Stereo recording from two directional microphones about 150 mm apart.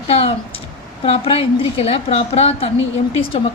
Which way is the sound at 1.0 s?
40° left (ahead or behind).